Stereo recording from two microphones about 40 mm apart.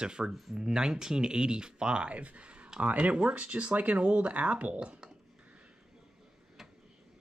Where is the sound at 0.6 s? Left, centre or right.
Centre.